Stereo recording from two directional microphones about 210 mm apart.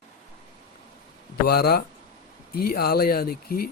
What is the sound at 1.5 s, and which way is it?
Speech, 50° left (ahead or behind).